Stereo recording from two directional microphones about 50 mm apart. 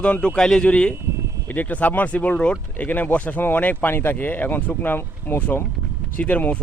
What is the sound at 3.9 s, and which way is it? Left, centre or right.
Speech, left.